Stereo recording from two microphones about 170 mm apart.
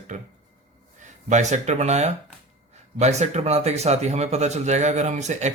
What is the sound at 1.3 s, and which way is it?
Speech, 45° right (ahead or behind).